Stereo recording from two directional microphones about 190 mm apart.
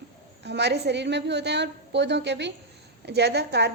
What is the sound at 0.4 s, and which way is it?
Speech, 65° right (ahead or behind).